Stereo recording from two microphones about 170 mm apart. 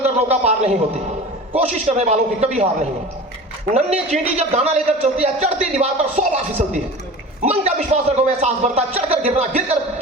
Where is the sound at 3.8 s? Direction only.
40° right (ahead or behind).